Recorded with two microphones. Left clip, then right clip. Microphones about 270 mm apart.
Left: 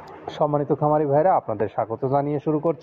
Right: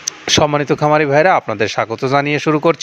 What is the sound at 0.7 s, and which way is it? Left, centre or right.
Speech, right.